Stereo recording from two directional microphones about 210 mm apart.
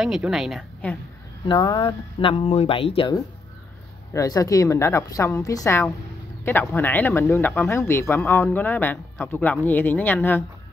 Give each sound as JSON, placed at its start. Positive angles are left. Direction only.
{"t": 0.0, "sound": "a woman's voice", "side_deg": 0}
{"t": 1.5, "sound": "speech", "side_deg": 20}